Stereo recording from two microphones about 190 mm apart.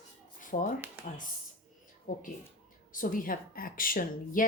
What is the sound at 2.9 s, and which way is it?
Speech, 45° left (ahead or behind).